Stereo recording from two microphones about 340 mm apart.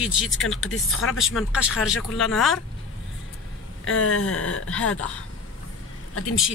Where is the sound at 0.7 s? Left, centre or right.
Left.